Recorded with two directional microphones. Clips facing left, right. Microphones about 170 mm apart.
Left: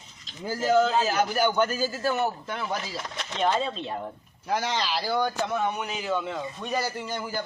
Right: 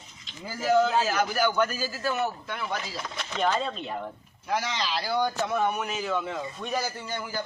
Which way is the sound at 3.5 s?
10° left (ahead or behind).